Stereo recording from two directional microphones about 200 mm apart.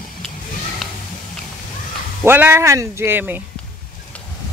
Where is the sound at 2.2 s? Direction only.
10° right (ahead or behind).